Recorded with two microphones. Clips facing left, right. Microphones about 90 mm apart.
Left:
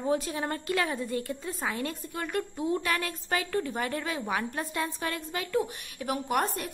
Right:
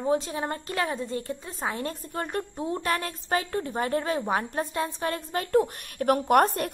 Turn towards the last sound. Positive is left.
turn(degrees=-60)  # may be behind; listen again after turning